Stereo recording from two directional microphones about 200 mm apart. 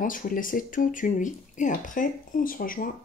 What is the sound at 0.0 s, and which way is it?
Speech, 45° left (ahead or behind).